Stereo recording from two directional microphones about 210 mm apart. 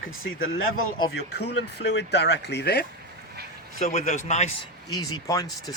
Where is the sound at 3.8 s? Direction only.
35° left (ahead or behind).